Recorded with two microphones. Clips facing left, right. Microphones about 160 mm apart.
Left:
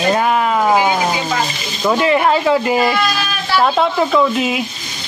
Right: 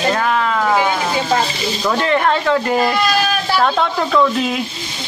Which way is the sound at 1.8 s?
10° left (ahead or behind).